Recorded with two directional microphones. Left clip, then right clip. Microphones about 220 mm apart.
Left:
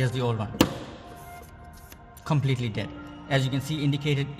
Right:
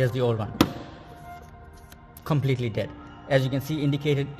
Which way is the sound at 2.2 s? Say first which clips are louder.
Right 2 dB; 30° right (ahead or behind).